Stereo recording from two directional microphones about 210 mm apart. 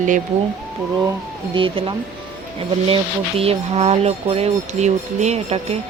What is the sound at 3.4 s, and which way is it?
Speech, 30° right (ahead or behind).